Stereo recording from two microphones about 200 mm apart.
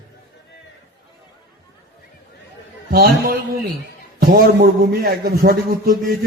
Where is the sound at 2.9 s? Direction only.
45° right (ahead or behind).